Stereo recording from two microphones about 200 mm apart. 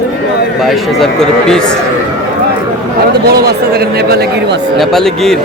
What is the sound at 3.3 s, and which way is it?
Speech, 50° right (ahead or behind).